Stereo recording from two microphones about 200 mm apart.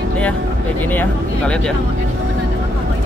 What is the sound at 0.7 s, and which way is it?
Speech, 10° left (ahead or behind).